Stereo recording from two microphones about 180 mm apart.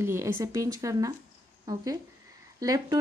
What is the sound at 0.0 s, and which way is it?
Speech, 15° right (ahead or behind).